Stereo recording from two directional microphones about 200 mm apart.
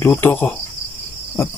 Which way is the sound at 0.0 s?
10° left (ahead or behind).